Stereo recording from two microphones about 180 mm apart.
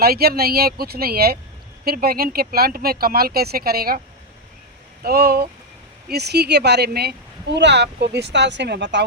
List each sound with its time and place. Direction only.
0.0 s speech: 60° right (ahead or behind)
5.0 s speech: 60° right (ahead or behind); by 9.0 s 75° right (ahead or behind)